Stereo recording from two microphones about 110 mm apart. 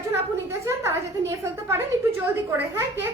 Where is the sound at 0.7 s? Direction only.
25° right (ahead or behind).